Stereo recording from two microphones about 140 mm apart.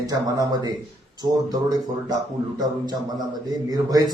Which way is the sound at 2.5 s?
30° right (ahead or behind).